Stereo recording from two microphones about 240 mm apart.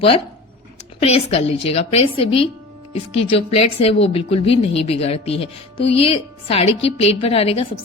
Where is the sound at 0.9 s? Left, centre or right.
Left.